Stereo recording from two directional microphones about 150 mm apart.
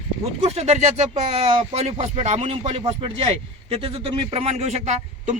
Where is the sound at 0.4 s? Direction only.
45° right (ahead or behind).